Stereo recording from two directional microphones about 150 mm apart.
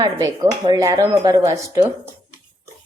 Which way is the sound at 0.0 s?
25° right (ahead or behind).